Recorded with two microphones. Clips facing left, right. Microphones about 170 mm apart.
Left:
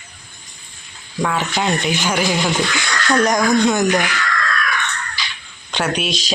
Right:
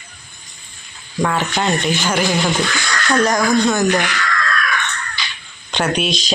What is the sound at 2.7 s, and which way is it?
Speech, 15° left (ahead or behind).